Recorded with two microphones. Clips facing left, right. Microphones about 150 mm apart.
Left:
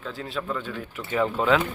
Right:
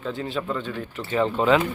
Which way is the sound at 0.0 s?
Centre (ahead or behind).